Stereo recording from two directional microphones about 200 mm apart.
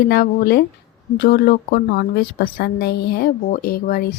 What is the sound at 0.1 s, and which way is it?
A woman's voice, 50° left (ahead or behind).